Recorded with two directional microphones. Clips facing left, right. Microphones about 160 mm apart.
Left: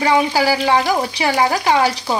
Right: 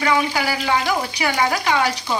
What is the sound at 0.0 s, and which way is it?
Speech, 30° left (ahead or behind).